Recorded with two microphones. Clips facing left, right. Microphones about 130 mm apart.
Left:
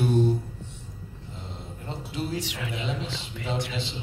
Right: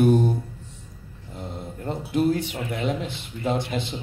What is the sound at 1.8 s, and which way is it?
Speech, 55° right (ahead or behind).